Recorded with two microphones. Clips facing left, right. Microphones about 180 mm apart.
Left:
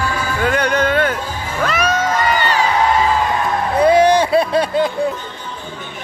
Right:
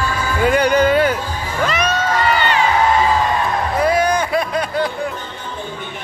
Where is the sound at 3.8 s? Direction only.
25° left (ahead or behind).